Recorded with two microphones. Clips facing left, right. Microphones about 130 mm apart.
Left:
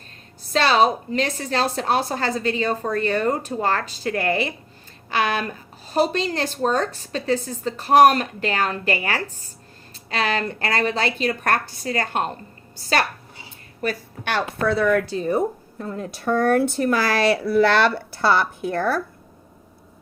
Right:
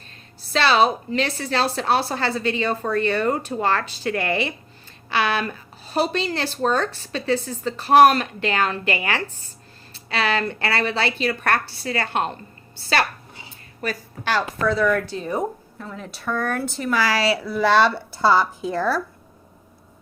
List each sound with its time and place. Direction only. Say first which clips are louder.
0.5 s a woman's voice: even; 40° left (ahead or behind)
14.3 s speech: even; 60° left (ahead or behind)
15.0 s speech: left 4 dB; 40° left (ahead or behind)
16.5 s speech: left 6 dB; 60° left (ahead or behind)